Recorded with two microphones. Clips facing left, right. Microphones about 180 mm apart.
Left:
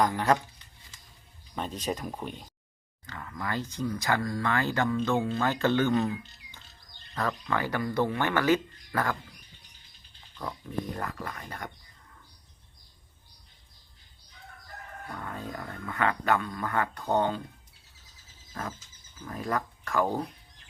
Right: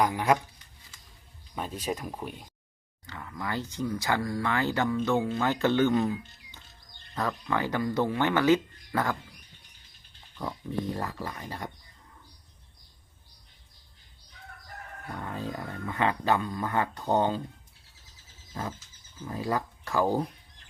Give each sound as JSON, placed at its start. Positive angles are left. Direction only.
{"t": 0.0, "sound": "speech", "side_deg": -10}
{"t": 1.5, "sound": "speech", "side_deg": -5}
{"t": 10.7, "sound": "speech", "side_deg": -25}
{"t": 15.1, "sound": "speech", "side_deg": -15}
{"t": 18.5, "sound": "speech", "side_deg": -20}